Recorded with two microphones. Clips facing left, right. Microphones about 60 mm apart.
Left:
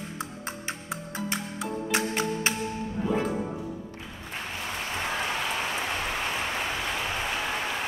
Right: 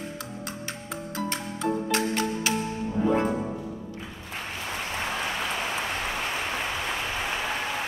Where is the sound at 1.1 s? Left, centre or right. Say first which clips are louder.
Right 2 dB; centre.